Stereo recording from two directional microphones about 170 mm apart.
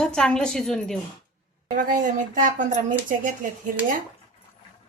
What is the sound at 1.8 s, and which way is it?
Speech, 50° right (ahead or behind).